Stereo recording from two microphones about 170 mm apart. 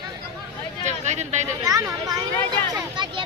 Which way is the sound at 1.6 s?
20° right (ahead or behind).